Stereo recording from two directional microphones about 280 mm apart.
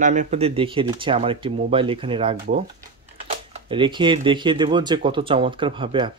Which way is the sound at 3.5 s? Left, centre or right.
Centre.